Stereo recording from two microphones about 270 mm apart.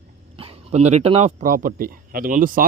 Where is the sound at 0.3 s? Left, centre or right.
Right.